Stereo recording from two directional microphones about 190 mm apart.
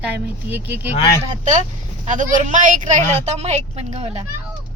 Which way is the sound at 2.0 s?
40° right (ahead or behind).